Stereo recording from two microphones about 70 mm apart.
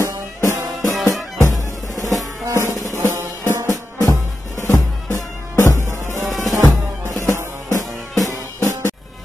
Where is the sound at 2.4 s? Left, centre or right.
Right.